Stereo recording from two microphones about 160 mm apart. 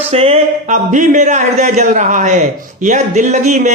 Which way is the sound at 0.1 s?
40° right (ahead or behind).